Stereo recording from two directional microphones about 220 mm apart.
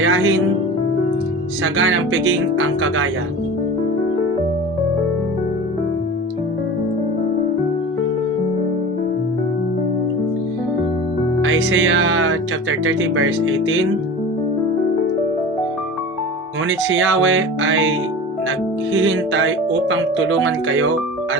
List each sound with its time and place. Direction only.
0.0 s speech: 65° right (ahead or behind)
1.6 s speech: 65° right (ahead or behind)
11.4 s music: 65° right (ahead or behind)
12.8 s speech: 65° right (ahead or behind)
16.6 s speech: 65° right (ahead or behind)
19.0 s speech: 65° right (ahead or behind)